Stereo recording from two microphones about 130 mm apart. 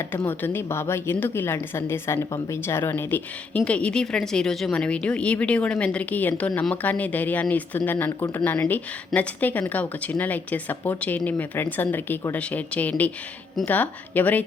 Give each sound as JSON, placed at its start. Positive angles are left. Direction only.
{"t": 0.3, "sound": "a woman's voice", "side_deg": 15}